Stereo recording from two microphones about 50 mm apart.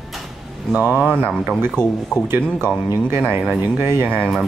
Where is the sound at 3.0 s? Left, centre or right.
Right.